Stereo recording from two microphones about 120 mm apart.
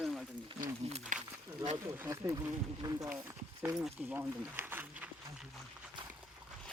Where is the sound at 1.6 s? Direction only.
25° right (ahead or behind).